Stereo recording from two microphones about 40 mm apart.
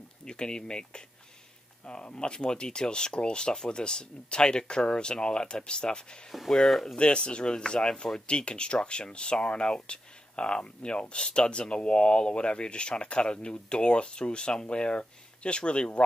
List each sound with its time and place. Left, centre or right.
0.2 s speech: left
2.1 s speech: left
6.5 s speech: centre
7.0 s speech: left